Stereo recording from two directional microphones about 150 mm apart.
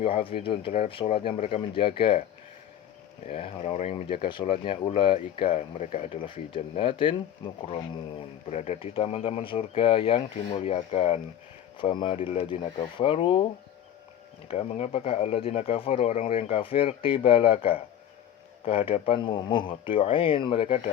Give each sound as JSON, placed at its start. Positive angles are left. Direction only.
{"t": 0.0, "sound": "speech", "side_deg": 40}
{"t": 3.2, "sound": "speech", "side_deg": 40}
{"t": 5.4, "sound": "speech", "side_deg": 45}
{"t": 6.2, "sound": "speech", "side_deg": 35}
{"t": 8.4, "sound": "speech", "side_deg": 50}